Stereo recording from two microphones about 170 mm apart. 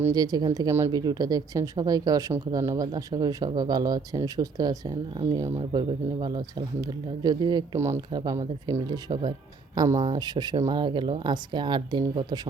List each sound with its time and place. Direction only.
0.0 s speech: 20° right (ahead or behind)